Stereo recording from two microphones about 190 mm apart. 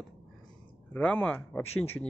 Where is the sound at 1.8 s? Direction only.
90° left.